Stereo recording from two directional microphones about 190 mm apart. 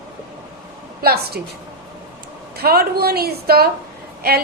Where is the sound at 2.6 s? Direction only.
55° right (ahead or behind).